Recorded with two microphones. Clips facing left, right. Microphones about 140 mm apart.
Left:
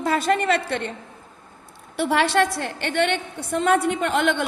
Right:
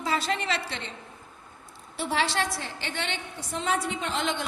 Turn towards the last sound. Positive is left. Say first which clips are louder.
# left 8 dB
turn(degrees=60)  # may be behind; listen again after turning